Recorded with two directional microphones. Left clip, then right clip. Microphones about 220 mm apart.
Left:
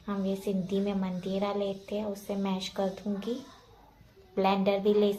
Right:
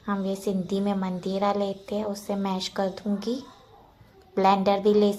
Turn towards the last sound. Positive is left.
turn(degrees=-30)  # may be behind; listen again after turning